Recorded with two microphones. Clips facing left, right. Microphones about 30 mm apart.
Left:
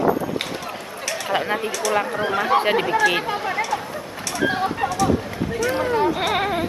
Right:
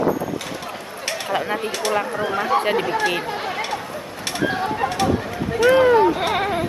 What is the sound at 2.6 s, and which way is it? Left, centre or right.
Speech, centre.